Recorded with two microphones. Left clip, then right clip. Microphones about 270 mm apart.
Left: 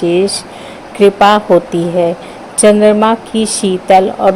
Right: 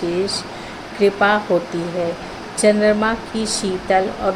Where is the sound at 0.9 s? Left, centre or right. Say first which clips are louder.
Left 8 dB; left.